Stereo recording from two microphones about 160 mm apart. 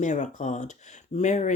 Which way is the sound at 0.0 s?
50° left (ahead or behind).